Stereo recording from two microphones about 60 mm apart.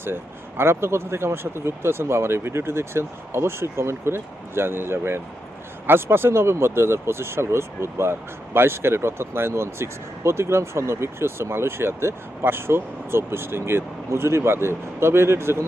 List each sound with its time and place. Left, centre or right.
0.0 s speech: right